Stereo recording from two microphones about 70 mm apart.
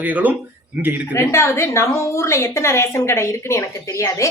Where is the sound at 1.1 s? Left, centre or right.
Left.